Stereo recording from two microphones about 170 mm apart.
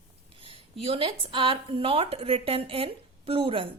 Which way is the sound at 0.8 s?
35° right (ahead or behind).